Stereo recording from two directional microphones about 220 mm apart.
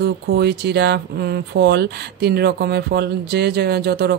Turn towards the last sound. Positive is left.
turn(degrees=-45)  # may be behind; listen again after turning